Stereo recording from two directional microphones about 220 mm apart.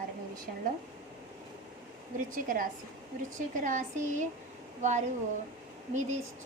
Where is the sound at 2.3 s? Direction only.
40° right (ahead or behind).